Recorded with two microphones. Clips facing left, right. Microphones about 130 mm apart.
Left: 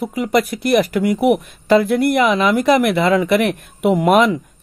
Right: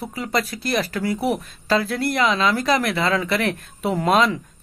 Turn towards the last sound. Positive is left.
turn(degrees=15)  # may be behind; listen again after turning